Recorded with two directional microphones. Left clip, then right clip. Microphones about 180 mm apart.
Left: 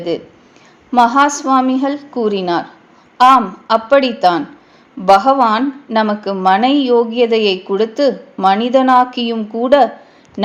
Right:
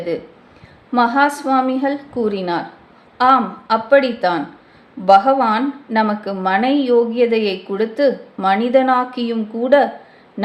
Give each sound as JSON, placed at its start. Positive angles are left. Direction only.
{"t": 0.9, "sound": "speech", "side_deg": 25}